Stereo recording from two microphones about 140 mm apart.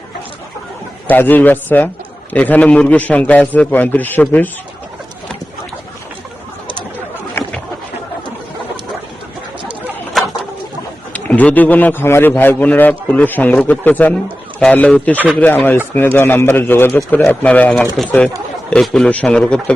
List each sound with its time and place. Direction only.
1.1 s a man's voice: 15° left (ahead or behind)
7.4 s chicken: 15° left (ahead or behind)
10.2 s bird: centre (ahead or behind)
11.1 s a man's voice: 10° left (ahead or behind)